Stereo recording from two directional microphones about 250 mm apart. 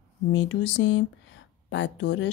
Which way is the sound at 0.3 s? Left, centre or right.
Left.